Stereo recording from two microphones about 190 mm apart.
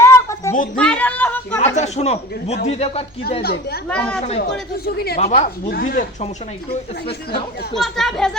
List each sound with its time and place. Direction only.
0.0 s a sound: 15° left (ahead or behind)
0.8 s speech: 5° left (ahead or behind)
1.6 s speech: 35° left (ahead or behind)
3.8 s a child's voice: 5° left (ahead or behind)
4.9 s speech: 55° left (ahead or behind)
7.8 s a child's voice: centre (ahead or behind)